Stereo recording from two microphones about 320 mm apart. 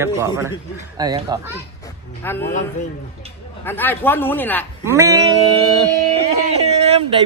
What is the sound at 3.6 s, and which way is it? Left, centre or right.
Speech, centre.